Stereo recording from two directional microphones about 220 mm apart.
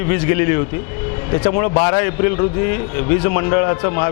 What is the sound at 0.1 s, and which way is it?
A man's voice, 15° left (ahead or behind).